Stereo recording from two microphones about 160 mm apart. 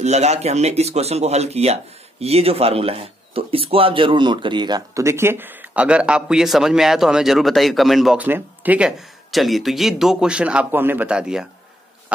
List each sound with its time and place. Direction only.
0.0 s speech: 45° right (ahead or behind); by 11.4 s 5° right (ahead or behind)